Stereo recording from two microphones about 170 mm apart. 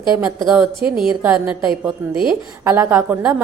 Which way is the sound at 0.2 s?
5° right (ahead or behind).